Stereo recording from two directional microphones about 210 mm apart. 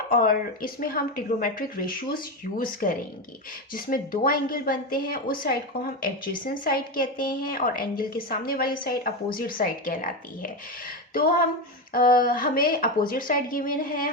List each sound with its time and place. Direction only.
0.1 s speech: 40° left (ahead or behind)